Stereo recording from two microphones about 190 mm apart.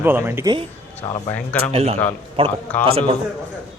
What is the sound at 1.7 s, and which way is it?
A man's voice, 35° right (ahead or behind).